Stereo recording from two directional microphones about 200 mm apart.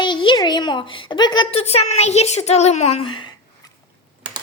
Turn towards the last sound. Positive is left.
turn(degrees=25)  # may be behind; listen again after turning